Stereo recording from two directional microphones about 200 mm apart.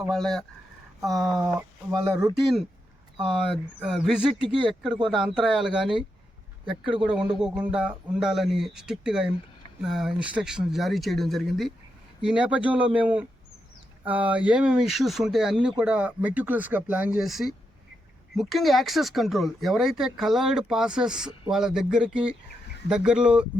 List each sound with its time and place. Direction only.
0.1 s speech: centre (ahead or behind)
1.9 s speech: 20° right (ahead or behind)
3.8 s speech: centre (ahead or behind)
6.7 s speech: 25° right (ahead or behind)
7.0 s speech: 5° right (ahead or behind)